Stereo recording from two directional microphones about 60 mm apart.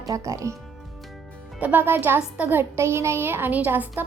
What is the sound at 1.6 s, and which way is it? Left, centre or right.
A child's voice, right.